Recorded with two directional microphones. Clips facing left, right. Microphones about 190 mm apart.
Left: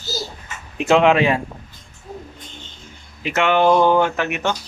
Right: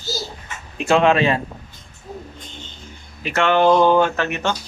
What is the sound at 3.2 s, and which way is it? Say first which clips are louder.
Speech: even; 15° left (ahead or behind).